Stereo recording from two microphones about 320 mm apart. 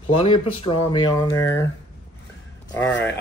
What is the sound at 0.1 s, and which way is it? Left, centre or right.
Speech, centre.